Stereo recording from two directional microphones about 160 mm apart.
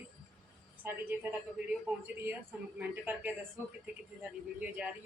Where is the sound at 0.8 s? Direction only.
10° right (ahead or behind).